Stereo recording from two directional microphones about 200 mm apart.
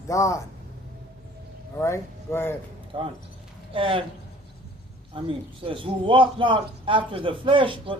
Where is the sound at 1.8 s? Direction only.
15° left (ahead or behind).